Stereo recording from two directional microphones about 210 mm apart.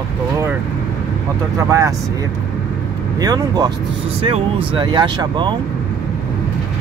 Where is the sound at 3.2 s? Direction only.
15° right (ahead or behind).